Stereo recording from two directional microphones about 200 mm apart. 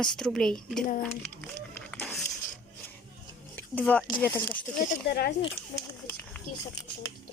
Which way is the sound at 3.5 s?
10° left (ahead or behind).